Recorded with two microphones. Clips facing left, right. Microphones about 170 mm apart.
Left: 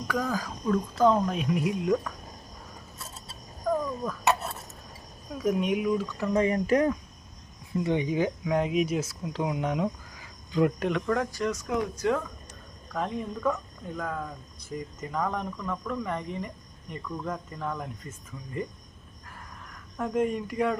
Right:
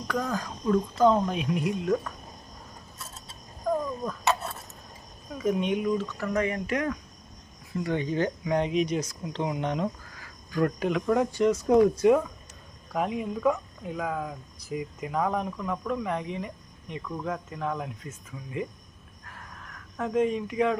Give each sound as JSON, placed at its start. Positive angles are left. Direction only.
{"t": 0.1, "sound": "speech", "side_deg": 5}
{"t": 3.8, "sound": "a sound", "side_deg": 0}
{"t": 5.3, "sound": "speech", "side_deg": 5}
{"t": 7.9, "sound": "speech", "side_deg": 15}
{"t": 11.3, "sound": "speech", "side_deg": -25}
{"t": 11.9, "sound": "speech", "side_deg": -20}
{"t": 12.9, "sound": "speech", "side_deg": -10}
{"t": 19.2, "sound": "a sound", "side_deg": 0}